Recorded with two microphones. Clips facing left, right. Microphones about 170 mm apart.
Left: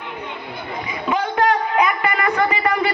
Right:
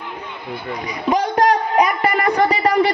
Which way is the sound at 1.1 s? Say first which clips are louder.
Right 2 dB; 40° right (ahead or behind).